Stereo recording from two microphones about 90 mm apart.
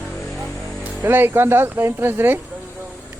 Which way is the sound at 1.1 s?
25° right (ahead or behind).